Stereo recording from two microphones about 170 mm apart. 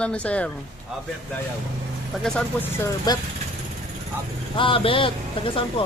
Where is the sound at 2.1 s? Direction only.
5° left (ahead or behind).